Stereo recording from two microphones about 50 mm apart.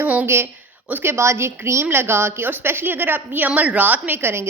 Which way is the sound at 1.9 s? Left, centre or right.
Right.